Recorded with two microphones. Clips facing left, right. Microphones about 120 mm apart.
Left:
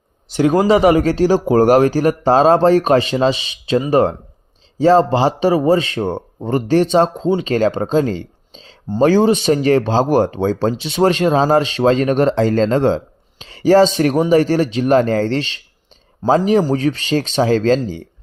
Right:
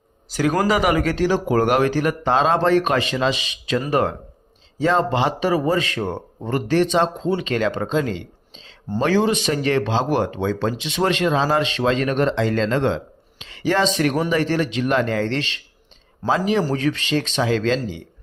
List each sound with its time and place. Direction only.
0.3 s a man's voice: 25° left (ahead or behind); by 18.0 s 40° left (ahead or behind)